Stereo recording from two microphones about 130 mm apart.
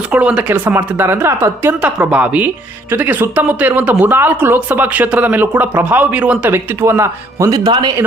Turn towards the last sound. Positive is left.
turn(degrees=-30)  # may be behind; listen again after turning